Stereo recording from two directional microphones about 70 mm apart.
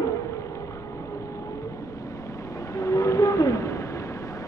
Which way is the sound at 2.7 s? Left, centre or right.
Left.